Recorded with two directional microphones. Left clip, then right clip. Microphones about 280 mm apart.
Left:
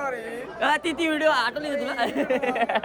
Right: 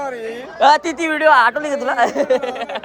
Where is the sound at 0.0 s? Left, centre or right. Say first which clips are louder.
Right 4 dB; right.